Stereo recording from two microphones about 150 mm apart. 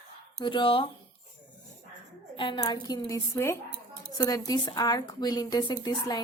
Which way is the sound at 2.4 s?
30° left (ahead or behind).